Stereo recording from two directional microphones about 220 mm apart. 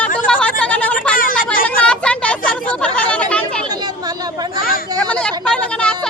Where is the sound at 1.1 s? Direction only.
40° left (ahead or behind).